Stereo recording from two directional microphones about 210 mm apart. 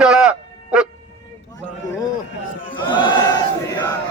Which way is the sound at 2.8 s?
20° left (ahead or behind).